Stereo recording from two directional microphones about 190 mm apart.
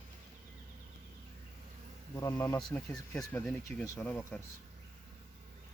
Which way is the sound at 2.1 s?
20° left (ahead or behind).